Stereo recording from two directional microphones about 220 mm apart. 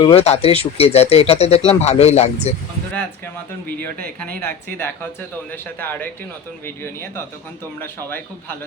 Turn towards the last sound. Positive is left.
turn(degrees=10)  # may be behind; listen again after turning